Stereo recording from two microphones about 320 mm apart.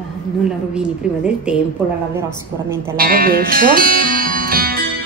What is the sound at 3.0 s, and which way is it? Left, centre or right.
Speech, right.